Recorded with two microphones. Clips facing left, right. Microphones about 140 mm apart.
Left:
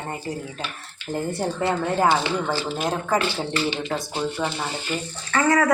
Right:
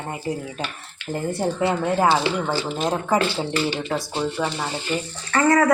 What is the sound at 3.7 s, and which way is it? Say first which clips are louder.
A woman's voice: right 2 dB; centre (ahead or behind).